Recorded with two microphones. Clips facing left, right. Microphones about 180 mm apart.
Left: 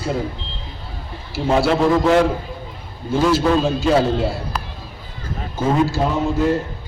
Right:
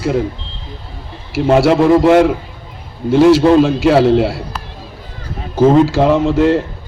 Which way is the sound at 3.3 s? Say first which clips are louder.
Right 7 dB; 90° right.